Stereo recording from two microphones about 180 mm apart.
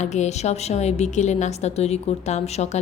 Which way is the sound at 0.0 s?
40° left (ahead or behind).